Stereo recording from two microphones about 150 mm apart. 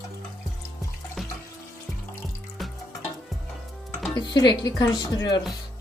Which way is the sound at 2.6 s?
Centre (ahead or behind).